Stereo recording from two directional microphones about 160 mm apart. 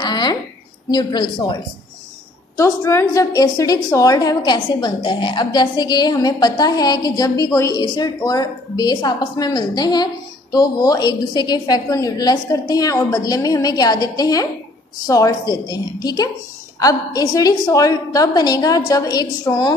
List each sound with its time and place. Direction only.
0.0 s a sound: 25° left (ahead or behind)
0.8 s a woman's voice: 30° left (ahead or behind)
2.5 s a woman's voice: 20° left (ahead or behind)